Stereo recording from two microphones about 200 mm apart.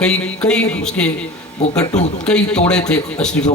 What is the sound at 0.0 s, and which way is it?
A man's voice, 5° left (ahead or behind).